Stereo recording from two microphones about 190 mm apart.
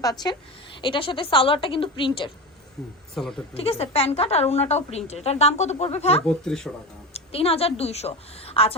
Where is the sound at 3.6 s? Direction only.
30° left (ahead or behind).